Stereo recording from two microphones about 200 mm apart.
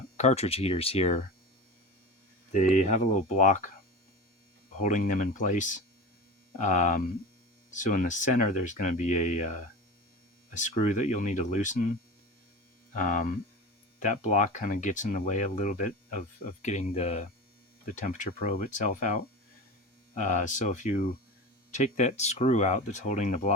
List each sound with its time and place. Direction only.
0.2 s speech: 35° left (ahead or behind)
2.5 s speech: 35° left (ahead or behind)
4.8 s speech: 40° left (ahead or behind)
13.1 s speech: 40° left (ahead or behind)